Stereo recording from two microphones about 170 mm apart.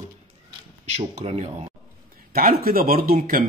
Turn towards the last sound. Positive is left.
turn(degrees=-55)  # may be behind; listen again after turning